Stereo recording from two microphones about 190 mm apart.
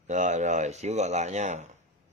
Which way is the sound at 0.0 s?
40° right (ahead or behind).